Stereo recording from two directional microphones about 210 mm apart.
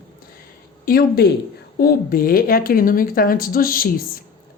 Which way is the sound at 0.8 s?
45° left (ahead or behind).